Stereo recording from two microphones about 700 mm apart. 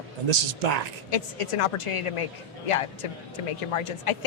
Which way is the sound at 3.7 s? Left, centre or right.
Left.